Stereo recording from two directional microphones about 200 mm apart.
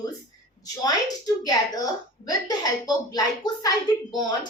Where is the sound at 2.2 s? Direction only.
20° left (ahead or behind).